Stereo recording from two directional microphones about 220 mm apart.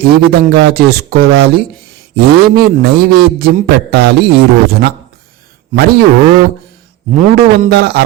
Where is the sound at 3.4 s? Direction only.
45° right (ahead or behind).